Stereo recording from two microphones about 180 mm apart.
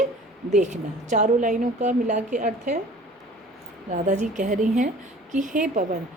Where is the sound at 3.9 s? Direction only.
40° right (ahead or behind).